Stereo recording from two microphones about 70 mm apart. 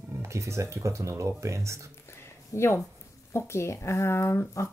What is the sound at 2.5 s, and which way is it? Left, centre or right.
Speech, left.